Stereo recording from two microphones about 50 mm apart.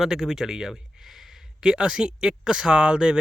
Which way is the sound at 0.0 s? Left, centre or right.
Centre.